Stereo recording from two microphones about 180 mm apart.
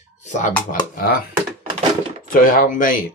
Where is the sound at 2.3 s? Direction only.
50° left (ahead or behind).